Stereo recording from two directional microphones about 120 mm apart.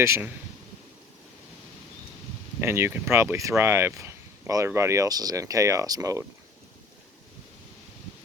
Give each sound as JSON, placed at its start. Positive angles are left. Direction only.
{"t": 0.0, "sound": "speech", "side_deg": -20}
{"t": 2.6, "sound": "speech", "side_deg": -20}